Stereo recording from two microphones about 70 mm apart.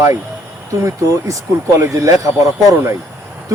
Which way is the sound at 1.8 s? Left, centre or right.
Right.